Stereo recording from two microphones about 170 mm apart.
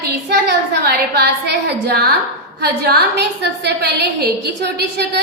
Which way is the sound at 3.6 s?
80° right.